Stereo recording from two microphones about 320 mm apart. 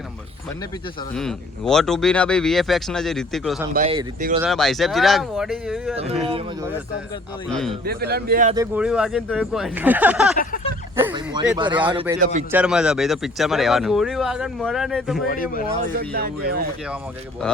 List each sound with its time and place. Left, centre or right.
1.1 s speech: centre
3.8 s speech: right
4.4 s speech: centre
7.5 s speech: centre
7.9 s speech: right
8.5 s speech: centre
10.3 s speech: left
11.0 s speech: centre
12.5 s speech: centre
15.3 s speech: left
16.0 s speech: right